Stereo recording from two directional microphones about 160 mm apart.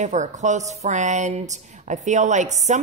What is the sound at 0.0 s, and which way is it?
A woman's voice, 50° right (ahead or behind).